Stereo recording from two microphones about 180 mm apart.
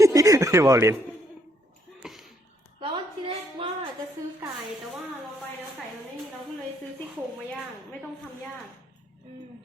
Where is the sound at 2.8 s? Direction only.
30° right (ahead or behind).